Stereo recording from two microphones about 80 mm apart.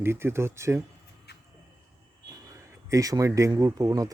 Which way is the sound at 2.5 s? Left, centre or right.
Right.